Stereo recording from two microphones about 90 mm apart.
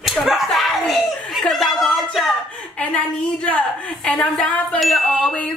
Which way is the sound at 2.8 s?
15° left (ahead or behind).